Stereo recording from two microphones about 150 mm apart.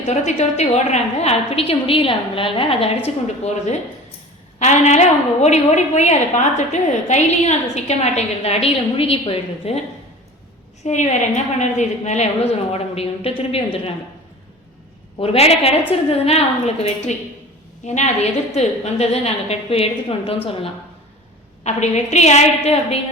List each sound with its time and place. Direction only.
0.1 s a woman's voice: 50° left (ahead or behind)
10.8 s a woman's voice: 50° left (ahead or behind)
15.2 s a woman's voice: 40° left (ahead or behind)